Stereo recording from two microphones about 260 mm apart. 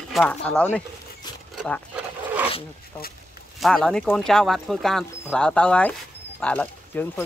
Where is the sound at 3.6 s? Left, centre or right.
Centre.